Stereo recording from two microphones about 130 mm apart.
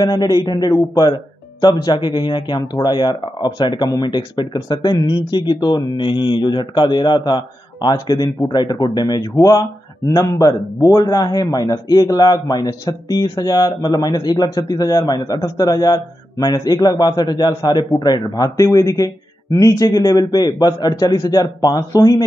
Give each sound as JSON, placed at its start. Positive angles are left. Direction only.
{"t": 0.0, "sound": "speech", "side_deg": 30}